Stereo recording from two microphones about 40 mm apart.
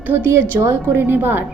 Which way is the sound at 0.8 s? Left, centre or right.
Right.